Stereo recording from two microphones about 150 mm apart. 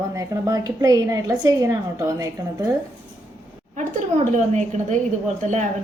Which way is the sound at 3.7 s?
55° right (ahead or behind).